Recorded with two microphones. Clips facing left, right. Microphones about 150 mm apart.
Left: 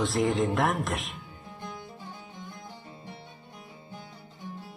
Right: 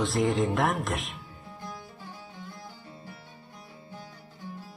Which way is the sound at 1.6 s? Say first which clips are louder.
Left 1 dB; 20° left (ahead or behind).